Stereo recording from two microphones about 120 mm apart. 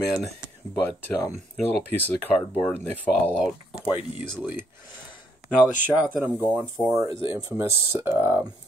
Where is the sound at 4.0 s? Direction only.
10° right (ahead or behind).